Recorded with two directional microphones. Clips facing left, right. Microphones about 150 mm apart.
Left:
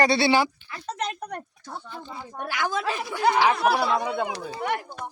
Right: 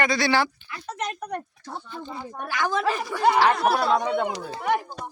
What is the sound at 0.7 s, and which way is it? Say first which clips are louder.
Speech: left 1 dB; 30° left (ahead or behind).